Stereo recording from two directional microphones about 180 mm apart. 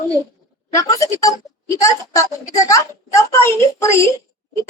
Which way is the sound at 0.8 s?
20° left (ahead or behind).